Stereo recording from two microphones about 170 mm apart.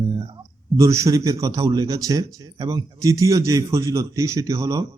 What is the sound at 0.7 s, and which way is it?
A man's voice, 20° right (ahead or behind).